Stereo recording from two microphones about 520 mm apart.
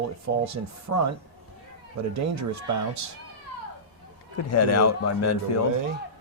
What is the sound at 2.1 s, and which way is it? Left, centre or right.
Speech, right.